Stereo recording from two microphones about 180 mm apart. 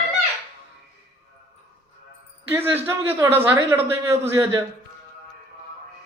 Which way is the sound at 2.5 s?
10° right (ahead or behind).